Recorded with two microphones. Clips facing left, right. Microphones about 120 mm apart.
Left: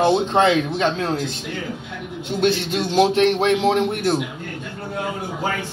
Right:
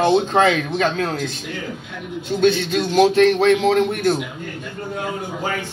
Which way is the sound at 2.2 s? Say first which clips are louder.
Right 3 dB; 25° left (ahead or behind).